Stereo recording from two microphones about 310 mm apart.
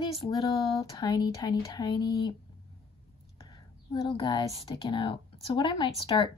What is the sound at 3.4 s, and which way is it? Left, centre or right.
Speech, centre.